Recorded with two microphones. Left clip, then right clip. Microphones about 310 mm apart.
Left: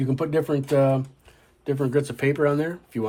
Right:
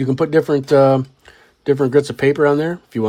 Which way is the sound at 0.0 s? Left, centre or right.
Right.